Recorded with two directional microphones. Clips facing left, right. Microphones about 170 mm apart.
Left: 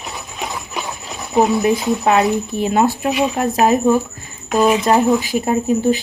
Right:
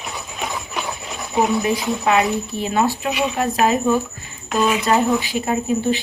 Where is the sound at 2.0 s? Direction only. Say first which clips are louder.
Left 1 dB; 40° left (ahead or behind).